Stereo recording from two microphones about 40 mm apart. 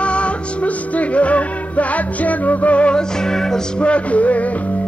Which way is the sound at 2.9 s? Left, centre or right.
Centre.